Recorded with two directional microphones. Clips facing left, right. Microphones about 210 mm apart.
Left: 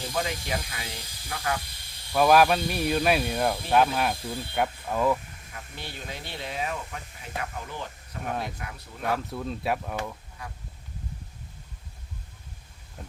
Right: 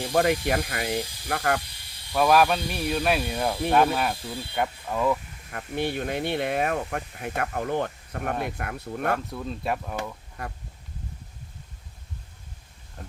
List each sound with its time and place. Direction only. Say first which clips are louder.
0.1 s speech: right 9 dB; 60° right (ahead or behind)
2.1 s speech: left 1 dB; centre (ahead or behind)
5.5 s speech: right 13 dB; 60° right (ahead or behind)
9.1 s speech: even; centre (ahead or behind)